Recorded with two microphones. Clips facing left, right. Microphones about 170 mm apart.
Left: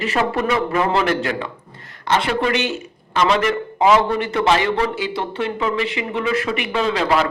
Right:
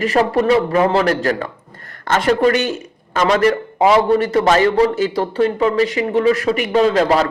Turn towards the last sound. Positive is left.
turn(degrees=-40)  # may be behind; listen again after turning